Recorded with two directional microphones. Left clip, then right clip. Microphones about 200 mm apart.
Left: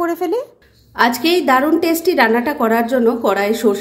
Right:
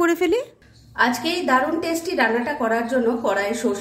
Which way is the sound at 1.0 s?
45° left (ahead or behind).